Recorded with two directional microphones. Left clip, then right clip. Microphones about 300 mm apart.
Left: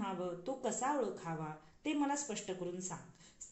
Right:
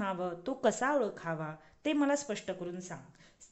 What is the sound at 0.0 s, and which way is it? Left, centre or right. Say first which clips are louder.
Speech: right 5 dB; right.